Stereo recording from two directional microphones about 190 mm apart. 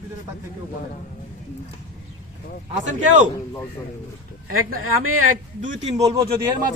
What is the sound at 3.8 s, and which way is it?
Speech, 20° left (ahead or behind).